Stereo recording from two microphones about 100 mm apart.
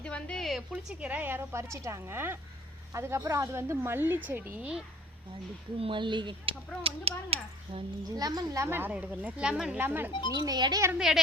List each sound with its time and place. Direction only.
0.0 s a sound: 10° left (ahead or behind)
0.7 s speech: 10° right (ahead or behind)
5.8 s speech: 55° right (ahead or behind)
6.8 s a child's voice: 80° right
8.1 s speech: 40° right (ahead or behind)
8.6 s speech: 20° right (ahead or behind)
9.8 s speech: 20° right (ahead or behind)
10.1 s speech: 55° left (ahead or behind)
10.3 s speech: 45° right (ahead or behind)
10.9 s a woman's voice: 5° right (ahead or behind)